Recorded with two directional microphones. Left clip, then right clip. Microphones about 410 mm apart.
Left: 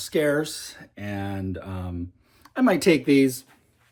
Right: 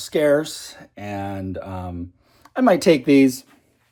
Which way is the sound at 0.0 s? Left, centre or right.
Centre.